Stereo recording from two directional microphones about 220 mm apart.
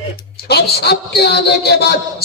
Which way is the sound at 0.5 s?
45° left (ahead or behind).